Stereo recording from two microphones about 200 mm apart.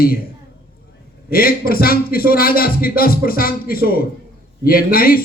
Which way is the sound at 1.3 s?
50° left (ahead or behind).